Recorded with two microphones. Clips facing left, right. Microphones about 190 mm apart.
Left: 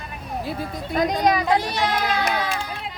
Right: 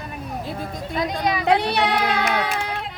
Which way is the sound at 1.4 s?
65° right (ahead or behind).